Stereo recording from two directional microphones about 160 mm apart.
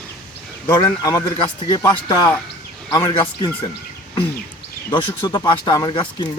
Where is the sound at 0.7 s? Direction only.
20° left (ahead or behind).